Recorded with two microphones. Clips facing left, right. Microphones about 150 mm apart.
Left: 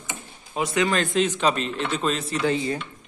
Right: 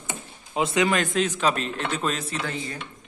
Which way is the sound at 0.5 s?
20° right (ahead or behind).